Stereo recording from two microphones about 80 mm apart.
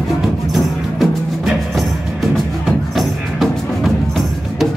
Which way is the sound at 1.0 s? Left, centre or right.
Centre.